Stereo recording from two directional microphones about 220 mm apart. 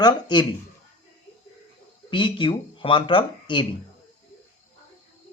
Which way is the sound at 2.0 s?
20° left (ahead or behind).